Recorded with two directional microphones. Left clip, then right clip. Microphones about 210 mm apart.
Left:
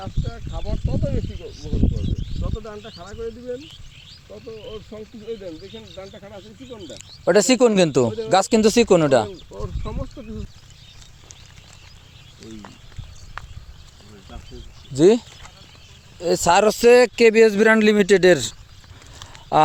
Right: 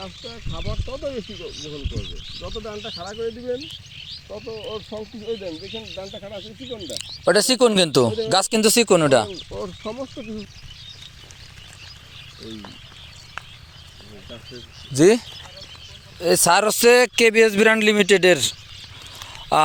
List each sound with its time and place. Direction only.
2.0 s speech: 55° left (ahead or behind)
2.4 s speech: 20° right (ahead or behind)
3.2 s speech: 5° right (ahead or behind)
3.7 s a sound: 45° left (ahead or behind)
4.4 s speech: centre (ahead or behind)
4.7 s speech: 20° right (ahead or behind)
6.9 s speech: centre (ahead or behind)
13.4 s a sound: centre (ahead or behind)
14.9 s speech: 5° left (ahead or behind)
16.2 s speech: 10° left (ahead or behind)